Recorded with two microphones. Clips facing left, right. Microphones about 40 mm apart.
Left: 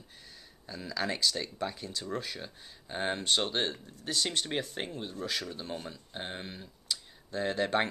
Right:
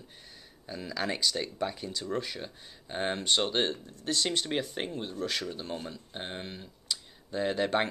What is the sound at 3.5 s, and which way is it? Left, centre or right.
Speech, right.